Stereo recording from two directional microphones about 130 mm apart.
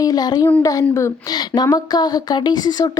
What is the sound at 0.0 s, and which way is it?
Speech, 30° left (ahead or behind).